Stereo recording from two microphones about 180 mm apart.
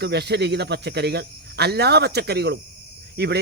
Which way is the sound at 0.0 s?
65° right (ahead or behind).